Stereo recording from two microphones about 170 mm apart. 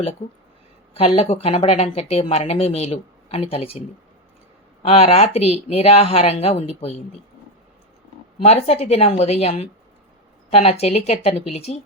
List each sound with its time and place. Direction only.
0.9 s speech: 35° left (ahead or behind)
8.4 s speech: 40° left (ahead or behind)